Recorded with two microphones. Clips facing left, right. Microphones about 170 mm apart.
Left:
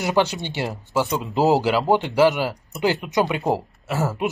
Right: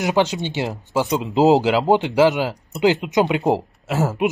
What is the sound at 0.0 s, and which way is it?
Speech, 15° right (ahead or behind).